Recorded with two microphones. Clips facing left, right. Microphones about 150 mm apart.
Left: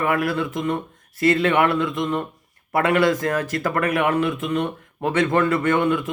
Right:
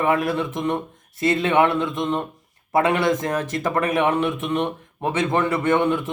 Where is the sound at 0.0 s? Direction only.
20° right (ahead or behind).